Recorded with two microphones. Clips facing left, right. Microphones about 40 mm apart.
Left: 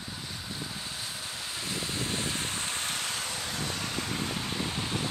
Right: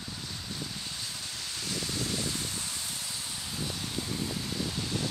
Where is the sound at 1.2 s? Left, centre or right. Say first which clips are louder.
Left 2 dB; left.